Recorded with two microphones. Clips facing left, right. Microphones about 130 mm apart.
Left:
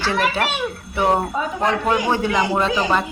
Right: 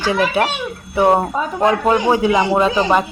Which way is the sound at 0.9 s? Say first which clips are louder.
Right 5 dB; 25° right (ahead or behind).